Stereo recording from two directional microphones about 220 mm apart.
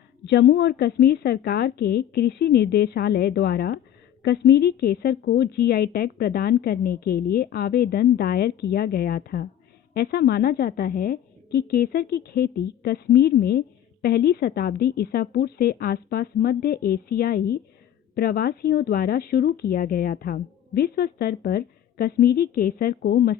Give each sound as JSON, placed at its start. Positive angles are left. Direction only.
{"t": 0.3, "sound": "a woman's voice", "side_deg": 50}